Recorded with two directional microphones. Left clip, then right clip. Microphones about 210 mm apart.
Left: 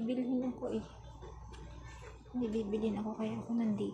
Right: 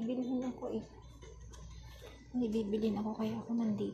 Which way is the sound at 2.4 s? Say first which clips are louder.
Right 1 dB; 10° right (ahead or behind).